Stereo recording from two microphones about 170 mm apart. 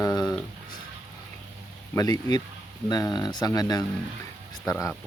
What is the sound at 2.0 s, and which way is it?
Speech, 20° left (ahead or behind).